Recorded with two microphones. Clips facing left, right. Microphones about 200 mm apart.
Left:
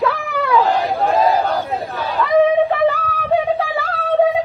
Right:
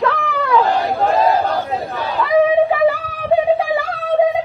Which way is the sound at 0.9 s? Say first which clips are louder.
Right 1 dB; centre (ahead or behind).